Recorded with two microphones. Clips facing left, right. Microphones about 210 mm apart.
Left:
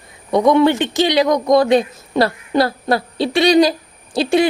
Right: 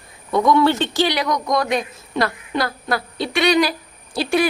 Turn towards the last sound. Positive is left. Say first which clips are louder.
# left 4 dB
turn(degrees=25)  # may be behind; listen again after turning